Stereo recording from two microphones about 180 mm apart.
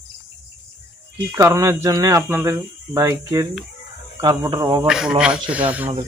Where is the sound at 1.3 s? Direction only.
15° right (ahead or behind).